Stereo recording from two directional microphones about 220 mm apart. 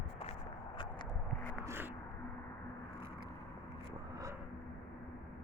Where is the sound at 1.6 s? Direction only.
10° right (ahead or behind).